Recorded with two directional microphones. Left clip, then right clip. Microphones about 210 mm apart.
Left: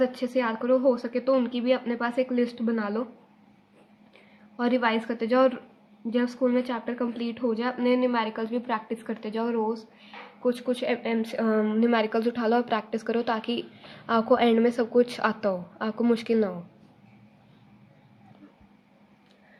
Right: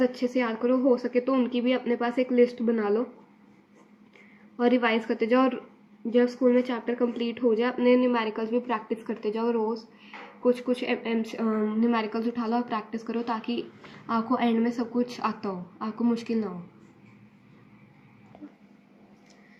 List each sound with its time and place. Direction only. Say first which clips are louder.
0.0 s a woman's voice: left 1 dB; 45° left (ahead or behind)
4.5 s a woman's voice: right 1 dB; 45° left (ahead or behind)